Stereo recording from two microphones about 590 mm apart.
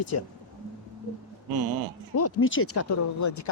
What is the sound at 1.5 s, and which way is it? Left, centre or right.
Speech, right.